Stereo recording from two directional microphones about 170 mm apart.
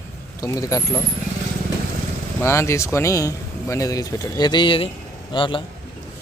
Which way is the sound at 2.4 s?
15° left (ahead or behind).